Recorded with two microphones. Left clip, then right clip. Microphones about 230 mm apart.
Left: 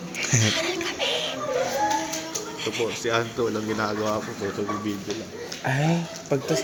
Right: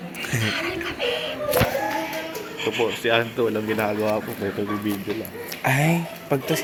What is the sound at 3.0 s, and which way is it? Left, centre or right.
Speech, centre.